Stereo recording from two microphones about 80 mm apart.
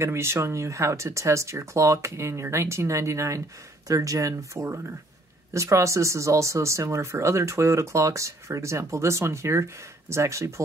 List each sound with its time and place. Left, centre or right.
0.0 s speech: right